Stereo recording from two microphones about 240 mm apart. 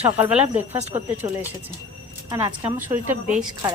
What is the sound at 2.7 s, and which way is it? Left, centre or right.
Speech, centre.